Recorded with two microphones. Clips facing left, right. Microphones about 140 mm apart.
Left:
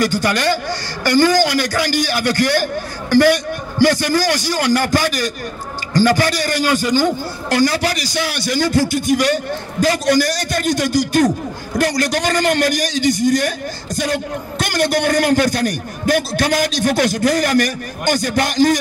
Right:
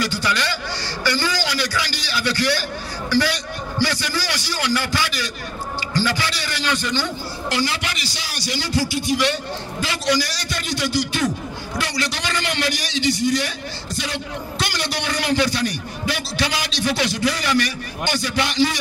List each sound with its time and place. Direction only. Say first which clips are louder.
0.0 s a man's voice: left 6 dB; 50° left (ahead or behind)